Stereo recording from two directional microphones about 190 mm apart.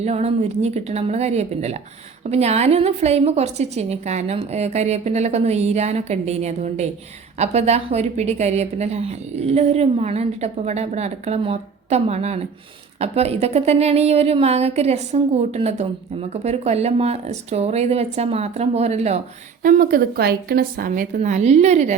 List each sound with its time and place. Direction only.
0.0 s a woman's voice: 35° right (ahead or behind)
19.6 s a woman's voice: 45° right (ahead or behind)